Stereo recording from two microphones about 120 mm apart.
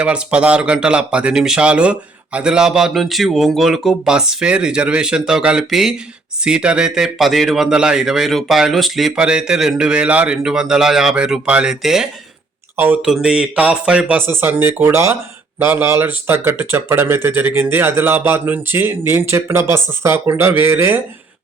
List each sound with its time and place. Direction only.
0.0 s a man's voice: 10° right (ahead or behind)